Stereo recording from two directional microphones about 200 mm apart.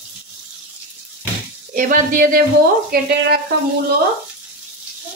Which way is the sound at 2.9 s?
50° right (ahead or behind).